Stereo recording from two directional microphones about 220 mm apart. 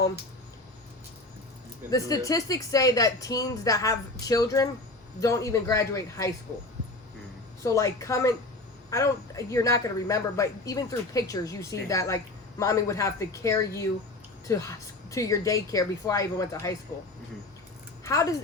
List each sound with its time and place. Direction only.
1.9 s speech: 15° left (ahead or behind)
7.6 s speech: 15° left (ahead or behind)
18.0 s speech: 15° left (ahead or behind)